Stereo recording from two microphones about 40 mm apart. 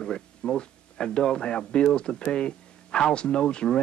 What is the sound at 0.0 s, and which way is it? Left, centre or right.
Speech, centre.